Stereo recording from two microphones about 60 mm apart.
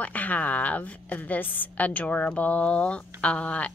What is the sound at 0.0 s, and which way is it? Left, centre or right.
A woman's voice, left.